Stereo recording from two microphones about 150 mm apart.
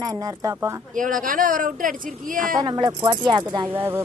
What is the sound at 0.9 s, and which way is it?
Speech, 60° right (ahead or behind).